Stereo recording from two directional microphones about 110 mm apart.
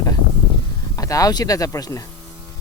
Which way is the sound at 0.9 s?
30° left (ahead or behind).